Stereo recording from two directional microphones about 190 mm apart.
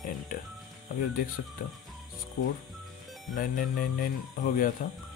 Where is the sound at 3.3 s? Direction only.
45° left (ahead or behind).